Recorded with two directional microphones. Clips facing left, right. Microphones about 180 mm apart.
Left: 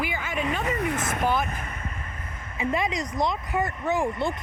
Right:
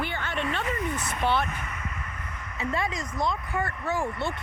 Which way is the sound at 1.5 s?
35° left (ahead or behind).